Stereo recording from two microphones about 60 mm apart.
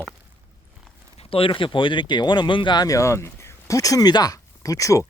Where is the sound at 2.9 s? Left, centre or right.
Left.